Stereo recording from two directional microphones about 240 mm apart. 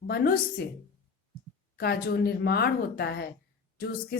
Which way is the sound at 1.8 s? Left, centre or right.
Left.